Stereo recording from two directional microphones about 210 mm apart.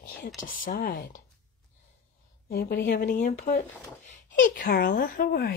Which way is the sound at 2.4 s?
45° left (ahead or behind).